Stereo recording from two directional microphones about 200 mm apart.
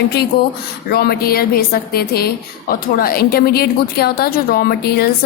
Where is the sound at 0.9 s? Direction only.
50° left (ahead or behind).